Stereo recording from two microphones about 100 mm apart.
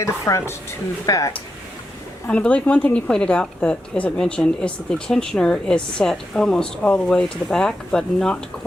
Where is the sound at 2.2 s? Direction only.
15° left (ahead or behind).